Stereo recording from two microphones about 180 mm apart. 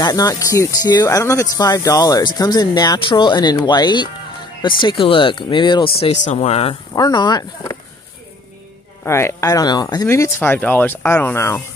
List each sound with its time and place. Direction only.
0.0 s speech: 20° left (ahead or behind)
6.9 s speech: 25° left (ahead or behind)
9.0 s speech: 15° left (ahead or behind)